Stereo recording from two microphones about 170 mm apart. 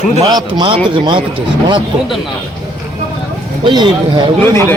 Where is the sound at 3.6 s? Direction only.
25° right (ahead or behind).